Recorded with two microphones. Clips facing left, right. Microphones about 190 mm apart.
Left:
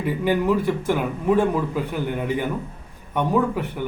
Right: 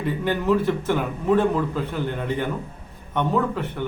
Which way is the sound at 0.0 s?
10° left (ahead or behind).